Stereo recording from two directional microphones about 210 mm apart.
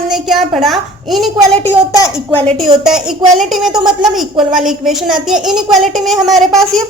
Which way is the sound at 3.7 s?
20° right (ahead or behind).